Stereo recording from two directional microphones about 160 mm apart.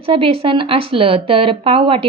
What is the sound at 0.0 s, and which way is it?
Speech, 35° right (ahead or behind).